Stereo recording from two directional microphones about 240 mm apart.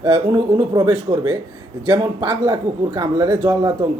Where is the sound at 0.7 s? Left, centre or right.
Centre.